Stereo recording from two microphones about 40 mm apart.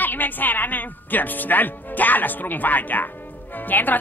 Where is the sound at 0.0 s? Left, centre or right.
Left.